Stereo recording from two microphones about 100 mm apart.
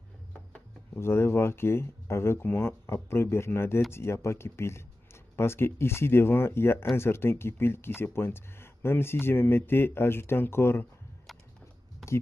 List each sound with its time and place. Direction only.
0.9 s speech: 25° left (ahead or behind)